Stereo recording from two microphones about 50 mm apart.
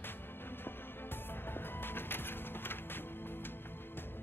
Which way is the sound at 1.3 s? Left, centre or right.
Left.